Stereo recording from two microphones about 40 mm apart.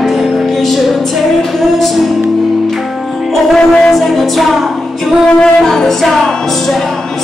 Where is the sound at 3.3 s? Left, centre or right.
Centre.